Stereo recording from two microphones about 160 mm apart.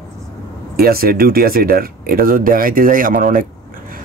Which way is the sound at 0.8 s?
70° right (ahead or behind).